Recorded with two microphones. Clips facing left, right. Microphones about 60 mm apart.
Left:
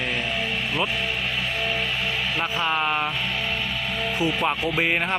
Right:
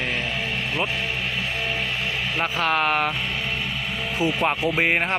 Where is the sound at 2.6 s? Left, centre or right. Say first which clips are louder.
Right 3 dB; right.